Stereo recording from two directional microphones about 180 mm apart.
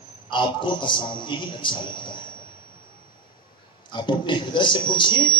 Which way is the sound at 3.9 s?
25° left (ahead or behind).